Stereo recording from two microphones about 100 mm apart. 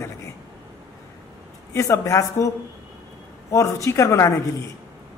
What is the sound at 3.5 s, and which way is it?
Speech, 30° left (ahead or behind).